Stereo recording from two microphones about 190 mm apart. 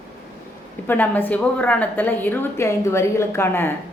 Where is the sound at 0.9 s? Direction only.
10° left (ahead or behind).